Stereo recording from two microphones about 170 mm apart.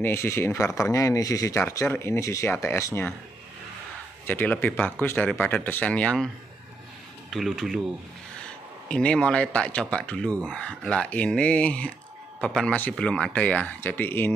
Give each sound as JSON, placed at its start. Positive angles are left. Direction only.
{"t": 0.0, "sound": "speech", "side_deg": 15}
{"t": 4.3, "sound": "speech", "side_deg": 10}
{"t": 7.2, "sound": "speech", "side_deg": 0}
{"t": 8.8, "sound": "speech", "side_deg": 5}